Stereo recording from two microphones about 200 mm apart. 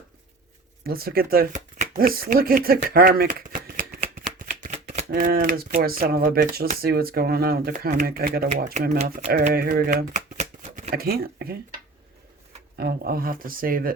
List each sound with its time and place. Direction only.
0.9 s speech: 50° right (ahead or behind)
12.7 s speech: 50° right (ahead or behind)